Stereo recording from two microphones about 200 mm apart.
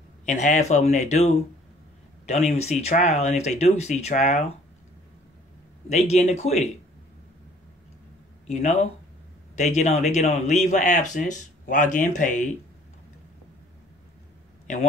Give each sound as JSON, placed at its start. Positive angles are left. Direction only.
{"t": 0.2, "sound": "speech", "side_deg": 35}
{"t": 5.9, "sound": "speech", "side_deg": 35}
{"t": 8.5, "sound": "speech", "side_deg": 35}